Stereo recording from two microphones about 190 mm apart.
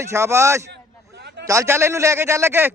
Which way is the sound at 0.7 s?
60° right (ahead or behind).